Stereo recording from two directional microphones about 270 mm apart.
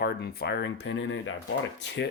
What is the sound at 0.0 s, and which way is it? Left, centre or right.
Speech, left.